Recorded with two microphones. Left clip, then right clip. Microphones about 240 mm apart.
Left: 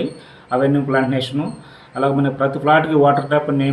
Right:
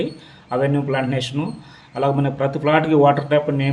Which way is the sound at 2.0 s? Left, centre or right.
Right.